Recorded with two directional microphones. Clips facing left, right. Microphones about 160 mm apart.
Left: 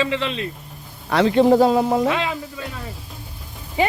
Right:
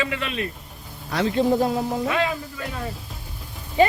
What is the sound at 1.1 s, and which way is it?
A man's voice, 75° left (ahead or behind).